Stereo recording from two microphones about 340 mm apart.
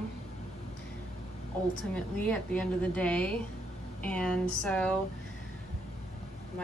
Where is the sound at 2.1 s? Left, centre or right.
Centre.